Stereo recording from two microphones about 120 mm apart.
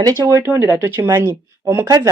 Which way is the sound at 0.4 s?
20° right (ahead or behind).